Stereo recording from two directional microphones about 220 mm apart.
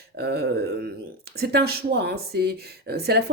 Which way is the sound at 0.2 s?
45° right (ahead or behind).